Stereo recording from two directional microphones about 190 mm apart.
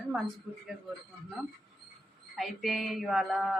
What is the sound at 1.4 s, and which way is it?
A woman's voice, centre (ahead or behind).